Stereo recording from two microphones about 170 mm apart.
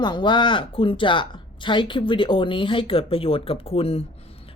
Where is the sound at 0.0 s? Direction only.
25° left (ahead or behind).